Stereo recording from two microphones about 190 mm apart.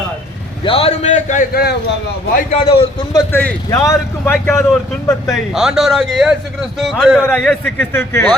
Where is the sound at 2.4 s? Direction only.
35° left (ahead or behind).